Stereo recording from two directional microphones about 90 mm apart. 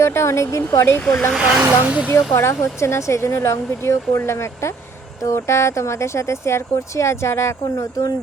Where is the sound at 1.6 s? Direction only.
15° right (ahead or behind).